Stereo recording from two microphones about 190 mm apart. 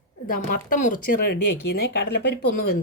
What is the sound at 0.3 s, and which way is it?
A woman's voice, 45° left (ahead or behind).